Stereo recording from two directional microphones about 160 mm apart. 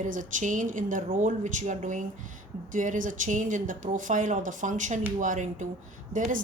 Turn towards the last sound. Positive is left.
turn(degrees=-55)  # may be behind; listen again after turning